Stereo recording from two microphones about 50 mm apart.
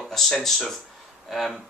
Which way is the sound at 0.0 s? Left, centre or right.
Centre.